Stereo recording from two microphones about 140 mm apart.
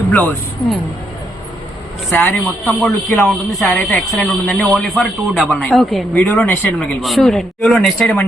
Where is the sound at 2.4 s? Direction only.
5° left (ahead or behind).